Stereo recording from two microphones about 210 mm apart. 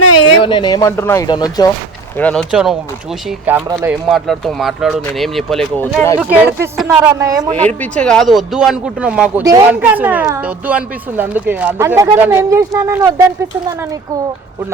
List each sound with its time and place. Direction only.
0.3 s speech: 20° left (ahead or behind)
2.1 s speech: 5° left (ahead or behind); by 3.9 s 10° right (ahead or behind)
4.1 s speech: centre (ahead or behind)
6.1 s speech: 5° right (ahead or behind)
7.8 s speech: 5° left (ahead or behind); by 13.2 s 15° right (ahead or behind)